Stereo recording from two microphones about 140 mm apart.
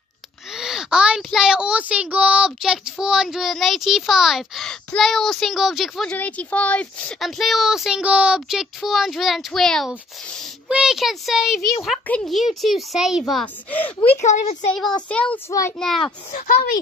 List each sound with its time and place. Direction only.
0.5 s speech: 5° right (ahead or behind)
6.0 s speech: 10° left (ahead or behind)
14.2 s a woman's voice: 55° left (ahead or behind)
15.0 s speech: 10° left (ahead or behind)
16.0 s a child's voice: 50° left (ahead or behind)
16.4 s speech: 75° left (ahead or behind)